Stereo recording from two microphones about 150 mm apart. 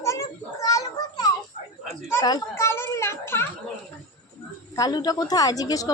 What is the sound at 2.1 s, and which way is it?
Children playing, 20° left (ahead or behind).